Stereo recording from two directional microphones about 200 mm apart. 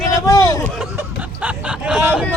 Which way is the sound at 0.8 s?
5° right (ahead or behind).